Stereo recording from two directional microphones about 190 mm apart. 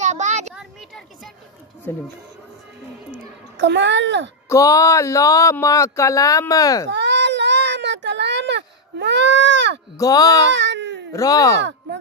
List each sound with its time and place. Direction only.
0.0 s a sound: 40° right (ahead or behind)
0.6 s a sound: centre (ahead or behind)
3.5 s a child's voice: 65° right (ahead or behind)
4.5 s speech: 15° left (ahead or behind)
6.9 s baby cry: 65° right (ahead or behind)
9.9 s speech: 20° left (ahead or behind)
10.5 s baby cry: 70° right (ahead or behind)
11.1 s speech: 20° left (ahead or behind)